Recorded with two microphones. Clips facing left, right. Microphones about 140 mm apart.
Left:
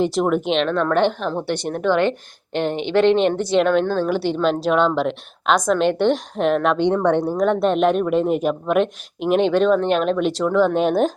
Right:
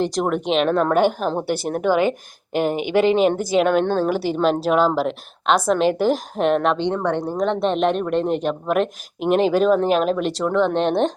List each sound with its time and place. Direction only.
0.0 s a woman's voice: centre (ahead or behind)
3.8 s a woman's voice: 30° right (ahead or behind)
4.1 s speech: 5° right (ahead or behind)
6.9 s a woman's voice: 10° right (ahead or behind)
7.6 s speech: centre (ahead or behind)